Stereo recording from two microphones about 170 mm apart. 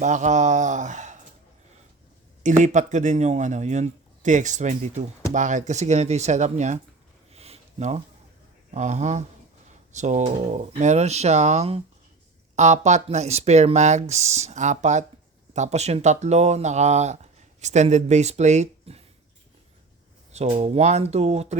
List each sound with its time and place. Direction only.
0.0 s speech: 45° right (ahead or behind)
2.4 s speech: 45° right (ahead or behind)
7.3 s a sound: 35° right (ahead or behind)
8.7 s speech: 45° right (ahead or behind)
20.3 s speech: 40° right (ahead or behind)